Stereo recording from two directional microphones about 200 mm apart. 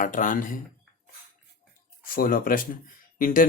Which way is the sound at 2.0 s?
45° left (ahead or behind).